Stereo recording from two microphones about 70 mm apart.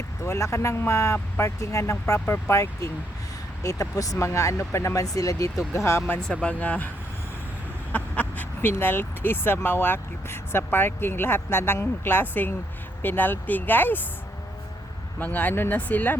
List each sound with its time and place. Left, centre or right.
0.3 s speech: left
2.2 s speech: left
3.6 s speech: left
5.0 s speech: left
6.2 s speech: centre
7.9 s a sound: left
8.7 s speech: left
15.2 s speech: left